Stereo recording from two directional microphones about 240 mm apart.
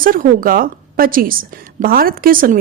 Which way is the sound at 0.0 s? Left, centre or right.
Right.